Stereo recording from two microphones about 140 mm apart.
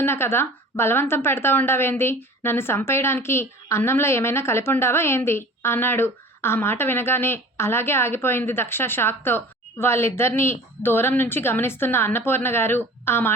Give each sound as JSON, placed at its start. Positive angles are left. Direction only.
{"t": 0.0, "sound": "a woman's voice", "side_deg": 15}